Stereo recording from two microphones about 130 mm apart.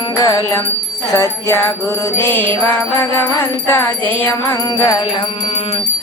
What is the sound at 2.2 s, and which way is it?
Music, 15° left (ahead or behind).